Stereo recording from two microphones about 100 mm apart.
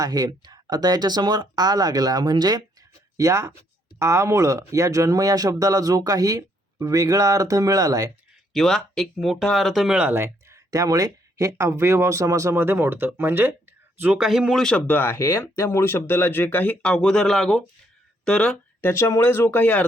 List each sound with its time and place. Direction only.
0.0 s speech: 40° right (ahead or behind)
3.2 s speech: 35° right (ahead or behind)
8.5 s speech: 5° left (ahead or behind)
10.1 s speech: 25° right (ahead or behind)
14.2 s speech: 5° right (ahead or behind)
14.6 s speech: 10° left (ahead or behind)
18.5 s speech: 20° left (ahead or behind)